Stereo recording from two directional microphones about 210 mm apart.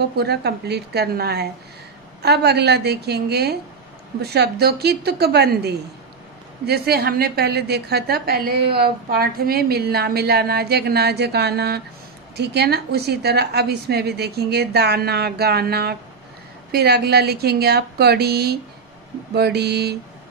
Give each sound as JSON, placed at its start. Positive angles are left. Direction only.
{"t": 0.1, "sound": "a woman's voice", "side_deg": -50}